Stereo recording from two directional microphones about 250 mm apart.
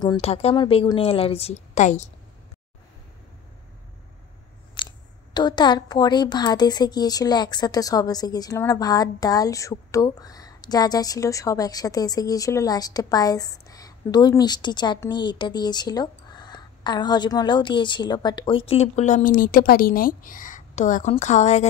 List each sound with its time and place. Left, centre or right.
0.0 s speech: centre
4.8 s a sound: centre
5.3 s a woman's voice: centre